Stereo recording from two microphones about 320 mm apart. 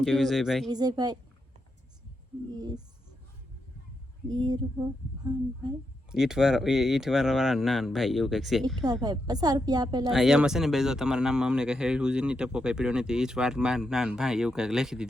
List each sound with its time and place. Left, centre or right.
0.0 s speech: centre
0.7 s speech: centre
2.6 s speech: centre
4.3 s speech: centre
6.1 s speech: centre
8.6 s speech: centre
10.1 s speech: centre